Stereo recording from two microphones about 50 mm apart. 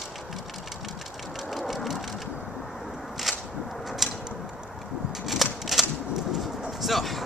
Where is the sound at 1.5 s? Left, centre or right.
Centre.